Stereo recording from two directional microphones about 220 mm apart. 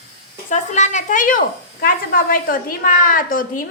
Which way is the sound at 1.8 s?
40° left (ahead or behind).